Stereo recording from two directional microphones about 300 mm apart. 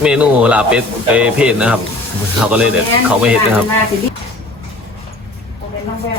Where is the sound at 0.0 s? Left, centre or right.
Centre.